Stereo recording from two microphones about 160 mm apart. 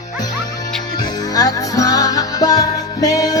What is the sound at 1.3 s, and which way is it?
Music, 20° left (ahead or behind).